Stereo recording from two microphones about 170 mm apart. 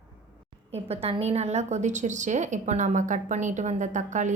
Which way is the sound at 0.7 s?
35° right (ahead or behind).